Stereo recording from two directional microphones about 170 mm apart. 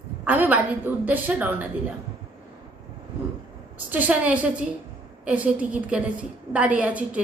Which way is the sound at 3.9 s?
10° right (ahead or behind).